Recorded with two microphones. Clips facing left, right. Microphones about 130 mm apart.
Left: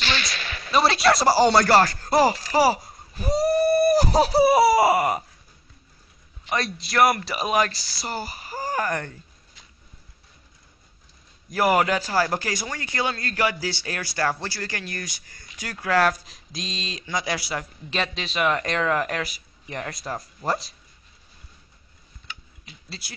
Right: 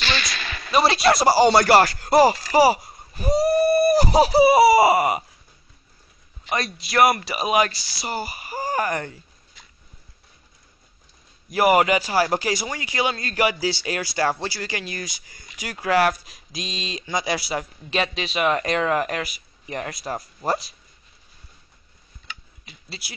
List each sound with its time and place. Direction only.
0.7 s a man's voice: 10° right (ahead or behind)
6.5 s speech: 10° right (ahead or behind)
7.7 s speech: 75° right (ahead or behind)
8.0 s speech: 5° right (ahead or behind)
11.5 s speech: 15° right (ahead or behind)
22.8 s speech: 10° right (ahead or behind)